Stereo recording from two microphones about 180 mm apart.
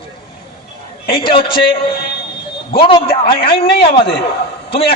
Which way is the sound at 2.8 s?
30° left (ahead or behind).